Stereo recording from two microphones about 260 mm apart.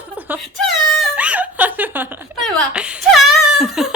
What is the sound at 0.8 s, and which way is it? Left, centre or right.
Air horn, centre.